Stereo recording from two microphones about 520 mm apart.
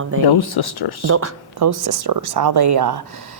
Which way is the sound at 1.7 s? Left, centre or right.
Right.